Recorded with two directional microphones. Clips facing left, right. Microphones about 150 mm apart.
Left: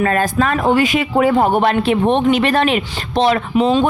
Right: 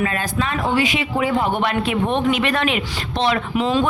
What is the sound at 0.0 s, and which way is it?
A man's voice, 50° left (ahead or behind).